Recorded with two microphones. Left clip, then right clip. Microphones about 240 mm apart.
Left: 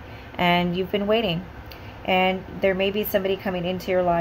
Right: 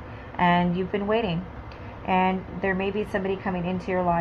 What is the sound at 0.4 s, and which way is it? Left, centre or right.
A woman's voice, left.